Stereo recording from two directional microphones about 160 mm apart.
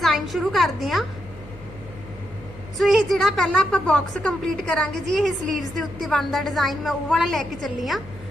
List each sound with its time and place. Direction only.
0.0 s a woman's voice: centre (ahead or behind)
2.7 s a woman's voice: centre (ahead or behind)